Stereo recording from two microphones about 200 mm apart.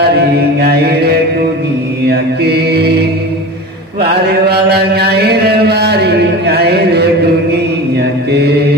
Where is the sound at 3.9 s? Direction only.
55° right (ahead or behind).